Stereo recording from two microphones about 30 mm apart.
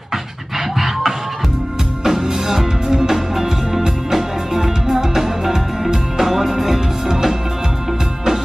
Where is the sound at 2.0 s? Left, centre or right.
Centre.